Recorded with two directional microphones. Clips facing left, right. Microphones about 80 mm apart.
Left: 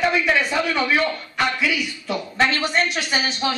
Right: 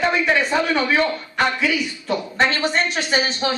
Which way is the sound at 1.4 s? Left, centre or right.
Right.